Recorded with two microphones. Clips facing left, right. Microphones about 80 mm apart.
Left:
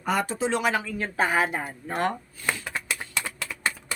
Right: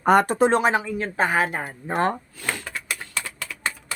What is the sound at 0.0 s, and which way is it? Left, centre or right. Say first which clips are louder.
Speech: right 9 dB; right.